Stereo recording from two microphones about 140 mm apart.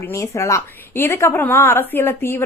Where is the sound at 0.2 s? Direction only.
20° left (ahead or behind).